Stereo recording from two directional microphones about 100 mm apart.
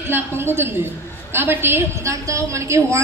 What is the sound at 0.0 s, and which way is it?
A woman's voice, 25° right (ahead or behind).